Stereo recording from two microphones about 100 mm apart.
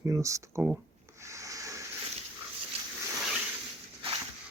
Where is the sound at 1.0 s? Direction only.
30° right (ahead or behind).